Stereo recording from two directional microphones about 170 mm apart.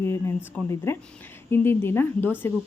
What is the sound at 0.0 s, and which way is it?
Speech, 15° left (ahead or behind).